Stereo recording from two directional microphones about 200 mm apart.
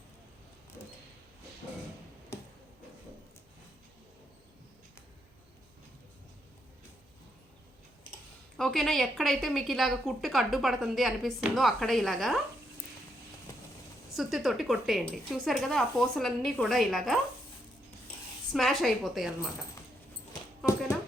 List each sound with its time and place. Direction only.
8.5 s a woman's voice: centre (ahead or behind)
13.5 s vehicle: 15° left (ahead or behind)
14.1 s a woman's voice: centre (ahead or behind)
18.5 s a woman's voice: centre (ahead or behind)